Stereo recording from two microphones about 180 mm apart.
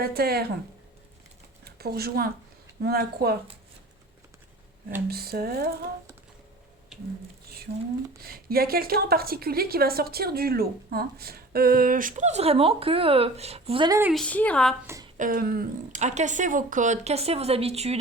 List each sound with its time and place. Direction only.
0.0 s a woman's voice: 60° right (ahead or behind)
1.6 s a woman's voice: 60° right (ahead or behind)
5.0 s a woman's voice: 60° right (ahead or behind)
8.2 s a woman's voice: 55° right (ahead or behind); by 14.0 s 25° right (ahead or behind)
14.1 s a woman's voice: 5° left (ahead or behind)
15.2 s a woman's voice: 55° right (ahead or behind)
16.0 s speech: 40° right (ahead or behind)